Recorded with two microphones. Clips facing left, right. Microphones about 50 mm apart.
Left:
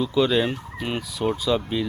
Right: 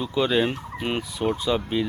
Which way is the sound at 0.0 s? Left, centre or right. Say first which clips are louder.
Left 2 dB; centre.